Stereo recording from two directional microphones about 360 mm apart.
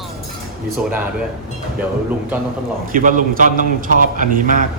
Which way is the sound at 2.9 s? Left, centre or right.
Right.